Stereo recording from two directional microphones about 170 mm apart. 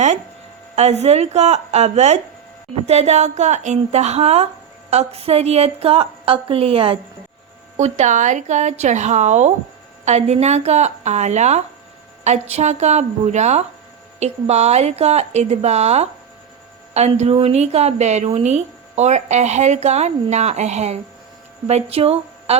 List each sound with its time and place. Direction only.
0.8 s a woman's voice: 40° right (ahead or behind)